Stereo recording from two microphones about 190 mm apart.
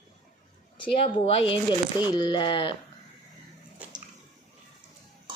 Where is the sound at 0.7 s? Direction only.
30° left (ahead or behind).